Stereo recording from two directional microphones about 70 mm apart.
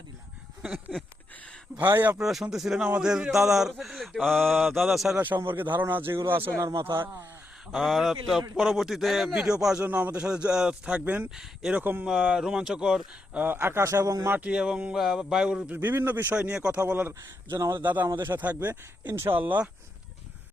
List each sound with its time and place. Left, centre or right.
1.8 s a man's voice: right
2.1 s speech: centre
5.1 s a man's voice: right
7.7 s speech: centre
9.8 s a man's voice: right
12.0 s speech: centre
13.3 s a man's voice: right
13.6 s speech: right
14.4 s speech: centre
14.9 s speech: centre
15.7 s a man's voice: right
16.3 s speech: centre
16.8 s a man's voice: right
19.4 s a man's voice: right